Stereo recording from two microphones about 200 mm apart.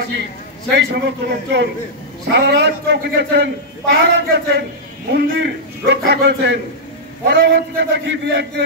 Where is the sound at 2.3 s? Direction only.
60° right (ahead or behind).